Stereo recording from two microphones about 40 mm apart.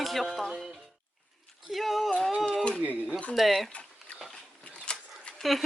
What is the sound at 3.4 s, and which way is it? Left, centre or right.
Speech, centre.